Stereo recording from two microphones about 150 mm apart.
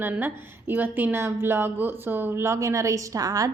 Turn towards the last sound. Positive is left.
turn(degrees=-25)  # may be behind; listen again after turning